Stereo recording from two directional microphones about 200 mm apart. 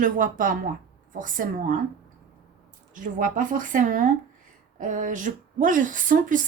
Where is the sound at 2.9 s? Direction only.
40° right (ahead or behind).